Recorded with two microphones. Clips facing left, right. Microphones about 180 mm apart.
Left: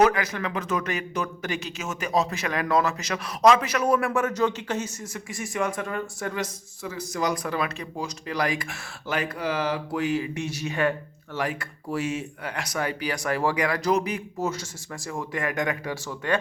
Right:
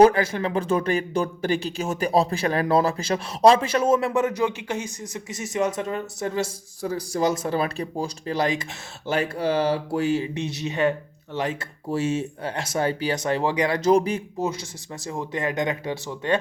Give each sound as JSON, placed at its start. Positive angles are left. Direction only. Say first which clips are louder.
{"t": 0.0, "sound": "speech", "louder": "right 5 dB", "side_deg": -30}
{"t": 14.3, "sound": "speech", "louder": "right 2 dB", "side_deg": -15}